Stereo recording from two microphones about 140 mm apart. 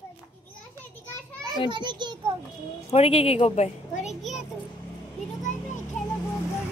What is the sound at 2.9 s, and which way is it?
Speech, 45° left (ahead or behind).